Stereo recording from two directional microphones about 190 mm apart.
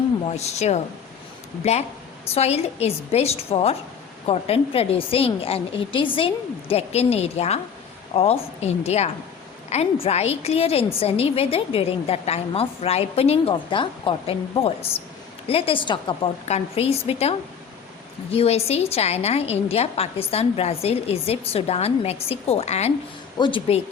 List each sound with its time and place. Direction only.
0.3 s a woman's voice: 35° left (ahead or behind)